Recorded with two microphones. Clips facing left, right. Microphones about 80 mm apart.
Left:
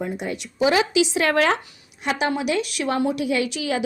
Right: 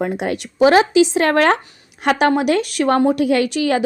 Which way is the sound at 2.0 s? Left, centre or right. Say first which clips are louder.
Right 8 dB; right.